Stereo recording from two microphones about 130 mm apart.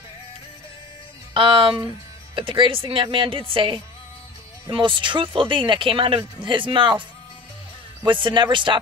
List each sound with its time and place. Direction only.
1.3 s speech: 40° right (ahead or behind)